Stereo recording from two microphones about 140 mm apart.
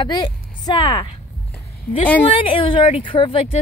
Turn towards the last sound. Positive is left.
turn(degrees=40)  # may be behind; listen again after turning